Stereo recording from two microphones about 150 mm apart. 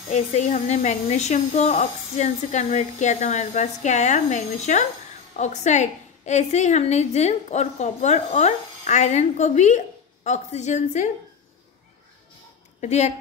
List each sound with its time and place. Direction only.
0.1 s a woman's voice: 50° left (ahead or behind)
12.8 s a woman's voice: 50° left (ahead or behind)